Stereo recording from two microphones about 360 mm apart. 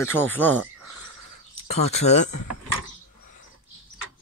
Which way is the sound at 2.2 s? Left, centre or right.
Left.